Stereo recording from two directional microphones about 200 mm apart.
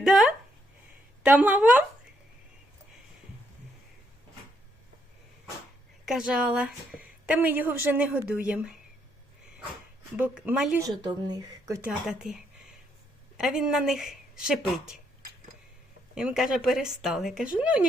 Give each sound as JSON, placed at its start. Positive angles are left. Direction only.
{"t": 0.0, "sound": "a sound", "side_deg": 0}
{"t": 1.2, "sound": "a woman's voice", "side_deg": -5}
{"t": 6.1, "sound": "a woman's voice", "side_deg": -5}
{"t": 10.2, "sound": "a woman's voice", "side_deg": -5}
{"t": 10.8, "sound": "a woman's voice", "side_deg": -20}
{"t": 11.8, "sound": "a woman's voice", "side_deg": -5}
{"t": 16.1, "sound": "a woman's voice", "side_deg": -5}